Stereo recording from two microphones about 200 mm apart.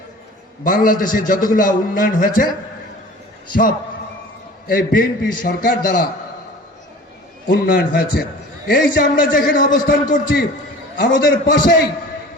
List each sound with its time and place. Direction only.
0.6 s a man's voice: 45° left (ahead or behind)
4.7 s a man's voice: 45° left (ahead or behind)
7.4 s a man's voice: 45° left (ahead or behind)